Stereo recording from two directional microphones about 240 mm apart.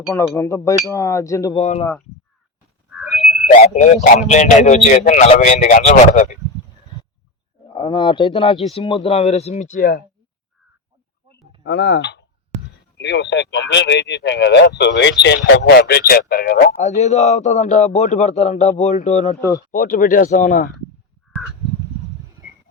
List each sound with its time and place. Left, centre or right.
0.3 s speech: centre
1.5 s a man's voice: left
3.0 s a sound: centre
3.4 s a man's voice: left
7.7 s a man's voice: centre
11.6 s speech: left
16.9 s a man's voice: left
19.4 s speech: centre
19.7 s a man's voice: left